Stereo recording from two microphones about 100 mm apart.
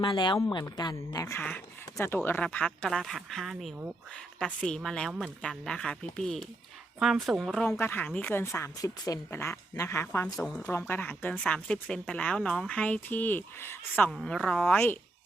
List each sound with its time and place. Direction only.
0.0 s speech: 50° left (ahead or behind)
0.9 s a woman's voice: 30° left (ahead or behind)
1.4 s speech: 15° left (ahead or behind); by 7.6 s centre (ahead or behind)
7.8 s speech: 20° left (ahead or behind)
14.3 s speech: 10° left (ahead or behind)